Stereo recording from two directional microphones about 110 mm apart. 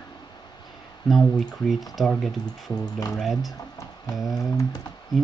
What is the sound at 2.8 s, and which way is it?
Speech, 30° left (ahead or behind).